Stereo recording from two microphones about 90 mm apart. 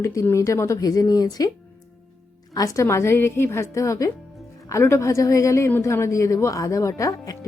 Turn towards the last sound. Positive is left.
turn(degrees=40)  # may be behind; listen again after turning